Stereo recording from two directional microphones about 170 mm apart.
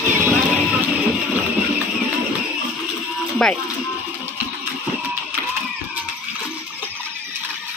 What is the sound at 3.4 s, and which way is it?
Speech, 5° left (ahead or behind).